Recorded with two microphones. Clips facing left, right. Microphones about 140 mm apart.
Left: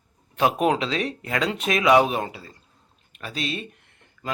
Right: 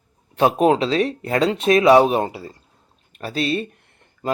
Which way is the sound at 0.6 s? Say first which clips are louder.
Right 6 dB; 30° right (ahead or behind).